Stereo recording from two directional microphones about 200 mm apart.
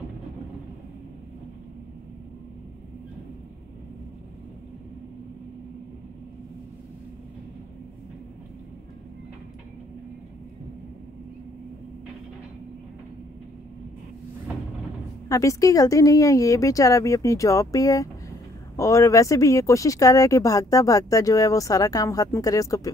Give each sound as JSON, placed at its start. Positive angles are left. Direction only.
{"t": 15.2, "sound": "speech", "side_deg": 15}